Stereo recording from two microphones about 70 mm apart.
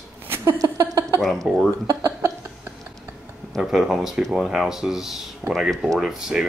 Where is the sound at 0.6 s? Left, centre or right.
Right.